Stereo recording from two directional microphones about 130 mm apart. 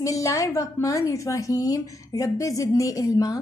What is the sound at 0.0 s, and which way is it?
A woman's voice, 25° left (ahead or behind).